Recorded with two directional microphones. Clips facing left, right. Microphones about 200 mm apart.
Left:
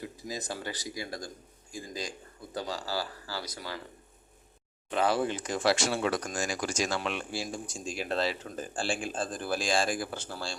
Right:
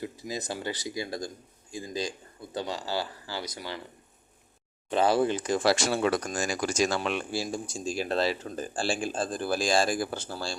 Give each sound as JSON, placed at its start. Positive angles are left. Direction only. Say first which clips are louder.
{"t": 0.3, "sound": "speech", "louder": "right 3 dB", "side_deg": -25}
{"t": 4.9, "sound": "speech", "louder": "right 4 dB", "side_deg": -30}